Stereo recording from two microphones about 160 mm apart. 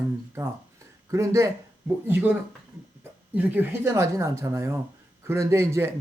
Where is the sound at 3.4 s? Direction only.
15° right (ahead or behind).